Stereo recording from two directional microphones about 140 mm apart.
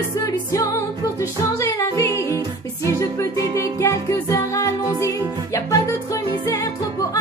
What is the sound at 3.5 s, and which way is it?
Music, 20° left (ahead or behind).